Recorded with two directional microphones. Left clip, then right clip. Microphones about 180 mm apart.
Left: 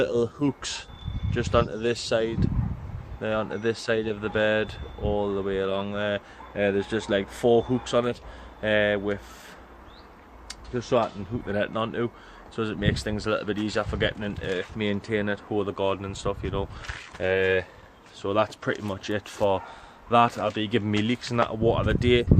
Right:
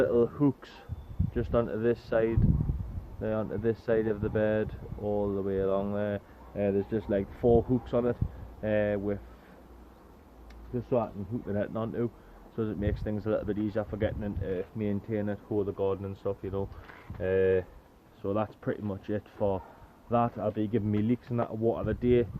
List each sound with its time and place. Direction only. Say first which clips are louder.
0.0 s speech: left 1 dB; 5° right (ahead or behind)
10.5 s speech: left 5 dB; 5° left (ahead or behind)